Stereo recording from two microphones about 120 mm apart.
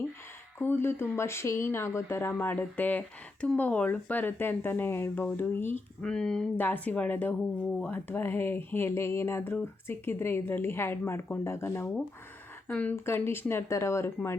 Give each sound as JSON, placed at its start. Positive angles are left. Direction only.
{"t": 0.6, "sound": "speech", "side_deg": 20}